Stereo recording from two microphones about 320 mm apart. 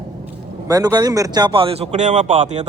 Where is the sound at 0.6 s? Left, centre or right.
Centre.